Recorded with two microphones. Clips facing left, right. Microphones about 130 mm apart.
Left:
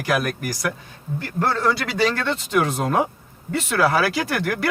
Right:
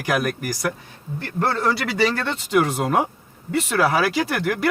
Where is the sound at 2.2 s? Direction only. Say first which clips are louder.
Right 1 dB; 10° right (ahead or behind).